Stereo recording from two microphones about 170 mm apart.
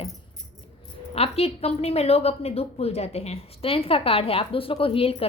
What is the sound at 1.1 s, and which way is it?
A woman's voice, 35° left (ahead or behind).